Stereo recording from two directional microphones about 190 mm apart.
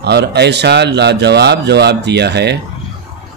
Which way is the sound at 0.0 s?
60° right (ahead or behind).